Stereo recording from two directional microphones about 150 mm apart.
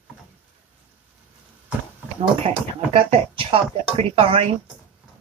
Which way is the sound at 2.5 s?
40° right (ahead or behind).